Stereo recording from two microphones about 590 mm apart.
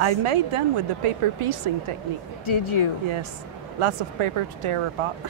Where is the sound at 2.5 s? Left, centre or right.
Left.